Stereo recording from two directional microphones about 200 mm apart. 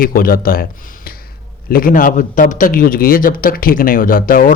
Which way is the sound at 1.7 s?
45° left (ahead or behind).